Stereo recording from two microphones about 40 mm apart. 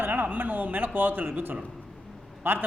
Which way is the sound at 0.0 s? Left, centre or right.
Right.